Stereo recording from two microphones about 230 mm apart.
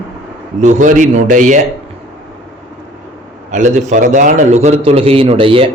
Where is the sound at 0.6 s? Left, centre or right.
Right.